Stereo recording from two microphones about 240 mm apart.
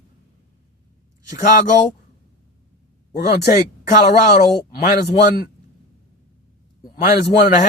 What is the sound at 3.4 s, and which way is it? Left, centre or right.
Speech, left.